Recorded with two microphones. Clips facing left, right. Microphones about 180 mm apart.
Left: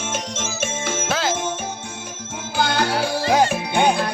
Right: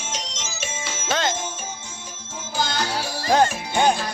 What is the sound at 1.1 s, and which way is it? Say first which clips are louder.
Music: even; 5° left (ahead or behind).